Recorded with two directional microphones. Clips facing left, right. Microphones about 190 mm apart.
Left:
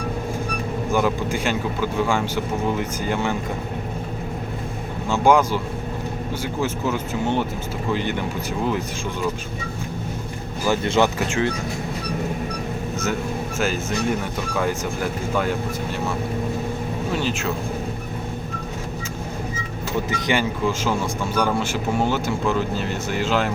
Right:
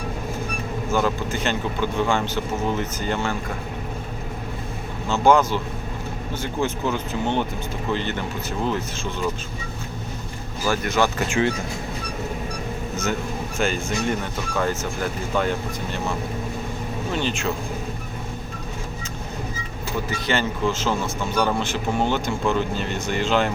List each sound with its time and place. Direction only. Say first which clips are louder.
0.9 s speech: left 1 dB; 15° left (ahead or behind)
5.0 s speech: even; 10° left (ahead or behind)
10.7 s speech: left 2 dB; 20° left (ahead or behind)
13.6 s speech: even; 5° left (ahead or behind)
17.1 s speech: even; 5° left (ahead or behind)
20.1 s speech: left 1 dB; 15° left (ahead or behind)